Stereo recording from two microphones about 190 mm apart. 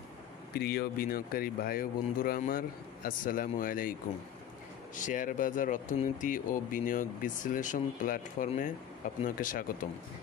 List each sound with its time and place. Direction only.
0.6 s speech: 55° left (ahead or behind)
4.9 s speech: 45° left (ahead or behind)